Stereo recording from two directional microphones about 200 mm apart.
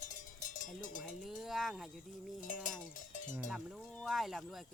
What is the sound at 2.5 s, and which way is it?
Cowbell, 40° left (ahead or behind).